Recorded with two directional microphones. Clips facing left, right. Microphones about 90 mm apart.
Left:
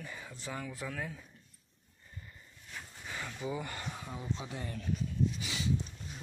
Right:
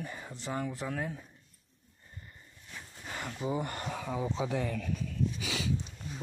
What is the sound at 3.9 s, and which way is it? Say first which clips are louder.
Speech: right 6 dB; 90° right.